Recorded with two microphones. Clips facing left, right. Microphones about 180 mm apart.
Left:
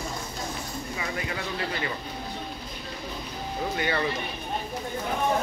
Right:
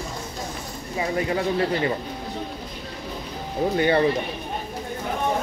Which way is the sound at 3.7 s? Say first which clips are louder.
Right 9 dB; 30° right (ahead or behind).